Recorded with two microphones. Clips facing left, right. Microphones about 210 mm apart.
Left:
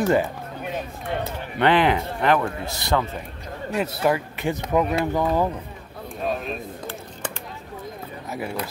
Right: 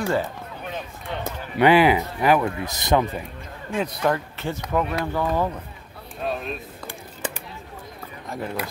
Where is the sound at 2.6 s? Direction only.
20° right (ahead or behind).